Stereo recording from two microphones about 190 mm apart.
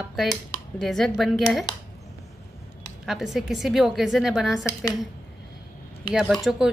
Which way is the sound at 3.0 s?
Centre (ahead or behind).